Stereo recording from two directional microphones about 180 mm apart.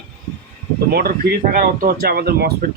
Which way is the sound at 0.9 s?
60° right (ahead or behind).